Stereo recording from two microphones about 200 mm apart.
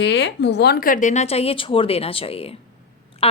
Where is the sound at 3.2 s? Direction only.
30° left (ahead or behind).